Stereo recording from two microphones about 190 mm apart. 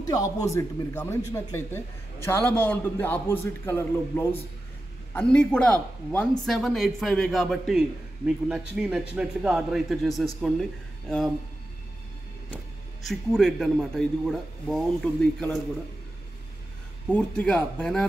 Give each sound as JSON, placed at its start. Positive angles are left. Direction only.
{"t": 0.0, "sound": "a man's voice", "side_deg": 20}
{"t": 13.1, "sound": "speech", "side_deg": 0}
{"t": 17.1, "sound": "speech", "side_deg": 5}